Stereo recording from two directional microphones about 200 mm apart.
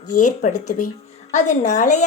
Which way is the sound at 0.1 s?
40° left (ahead or behind).